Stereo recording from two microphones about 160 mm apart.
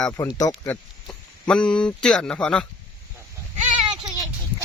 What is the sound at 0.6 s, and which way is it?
Speech, 10° left (ahead or behind).